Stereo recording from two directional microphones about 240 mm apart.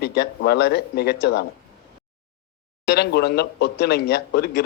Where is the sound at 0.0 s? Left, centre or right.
Left.